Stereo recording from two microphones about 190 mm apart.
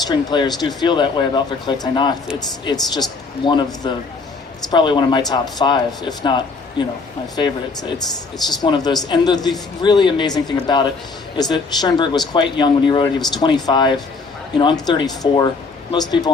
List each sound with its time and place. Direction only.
0.1 s speech: 20° left (ahead or behind)